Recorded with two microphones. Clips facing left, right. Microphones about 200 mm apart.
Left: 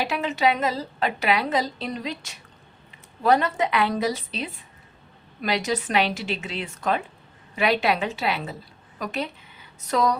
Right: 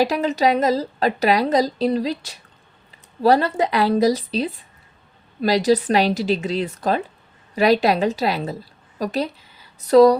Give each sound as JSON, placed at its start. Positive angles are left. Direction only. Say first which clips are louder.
{"t": 0.0, "sound": "a woman's voice", "louder": "right 5 dB", "side_deg": -40}